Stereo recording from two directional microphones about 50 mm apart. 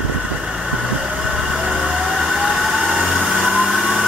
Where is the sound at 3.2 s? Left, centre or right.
Right.